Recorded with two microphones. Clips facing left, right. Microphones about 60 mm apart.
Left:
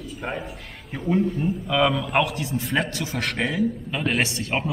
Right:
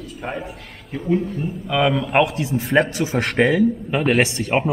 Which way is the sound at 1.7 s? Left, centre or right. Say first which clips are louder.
Right 4 dB; centre.